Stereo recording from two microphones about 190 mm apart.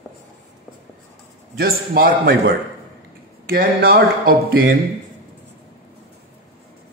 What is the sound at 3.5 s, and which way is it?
Speech, 50° right (ahead or behind).